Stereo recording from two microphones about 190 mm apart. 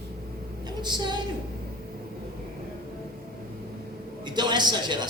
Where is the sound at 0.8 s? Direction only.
25° right (ahead or behind).